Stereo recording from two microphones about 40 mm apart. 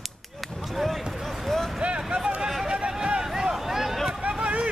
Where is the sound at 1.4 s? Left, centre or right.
Centre.